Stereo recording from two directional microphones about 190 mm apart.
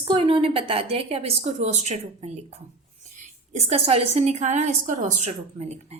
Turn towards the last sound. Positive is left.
turn(degrees=-35)  # may be behind; listen again after turning